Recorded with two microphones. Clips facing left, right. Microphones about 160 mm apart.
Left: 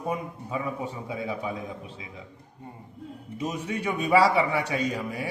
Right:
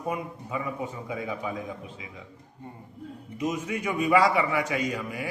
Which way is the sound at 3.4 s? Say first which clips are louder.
Right 1 dB; 30° left (ahead or behind).